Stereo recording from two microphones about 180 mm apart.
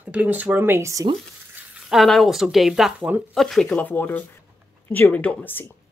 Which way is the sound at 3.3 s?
Centre (ahead or behind).